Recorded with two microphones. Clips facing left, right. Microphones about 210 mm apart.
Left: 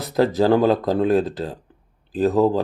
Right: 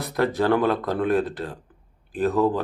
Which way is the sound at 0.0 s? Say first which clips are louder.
Left 4 dB; 20° left (ahead or behind).